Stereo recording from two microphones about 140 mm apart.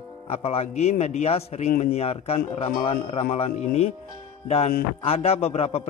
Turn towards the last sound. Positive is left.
turn(degrees=45)  # may be behind; listen again after turning